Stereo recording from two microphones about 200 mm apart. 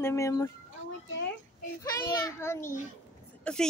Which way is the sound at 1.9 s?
15° left (ahead or behind).